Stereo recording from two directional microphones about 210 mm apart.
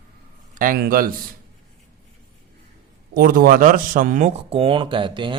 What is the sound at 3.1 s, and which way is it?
A man's voice, 45° right (ahead or behind).